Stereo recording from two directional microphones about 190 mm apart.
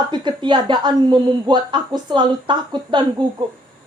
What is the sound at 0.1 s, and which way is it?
A woman's voice, 25° right (ahead or behind).